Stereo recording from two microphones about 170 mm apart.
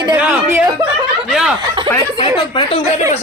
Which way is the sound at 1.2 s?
5° right (ahead or behind).